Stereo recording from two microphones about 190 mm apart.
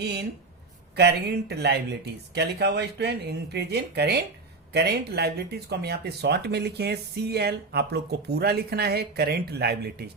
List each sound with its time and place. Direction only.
0.0 s speech: 60° right (ahead or behind)